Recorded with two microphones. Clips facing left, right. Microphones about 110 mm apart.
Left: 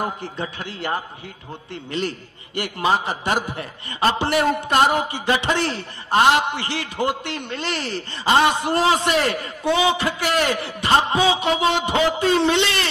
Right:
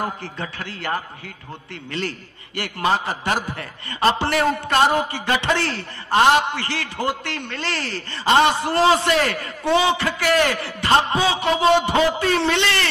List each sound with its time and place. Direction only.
0.0 s a man's voice: 20° left (ahead or behind)